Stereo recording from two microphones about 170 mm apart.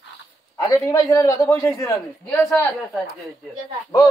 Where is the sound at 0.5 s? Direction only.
20° left (ahead or behind).